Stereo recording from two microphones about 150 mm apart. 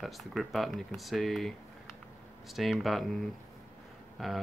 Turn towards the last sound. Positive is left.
turn(degrees=0)  # may be behind; listen again after turning